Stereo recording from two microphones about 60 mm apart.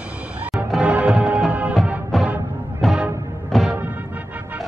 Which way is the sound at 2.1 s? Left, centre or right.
Centre.